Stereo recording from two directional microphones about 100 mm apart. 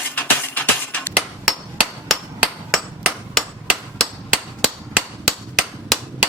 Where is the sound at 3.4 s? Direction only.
5° left (ahead or behind).